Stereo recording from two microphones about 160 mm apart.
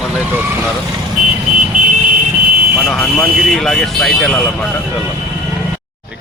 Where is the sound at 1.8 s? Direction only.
55° right (ahead or behind).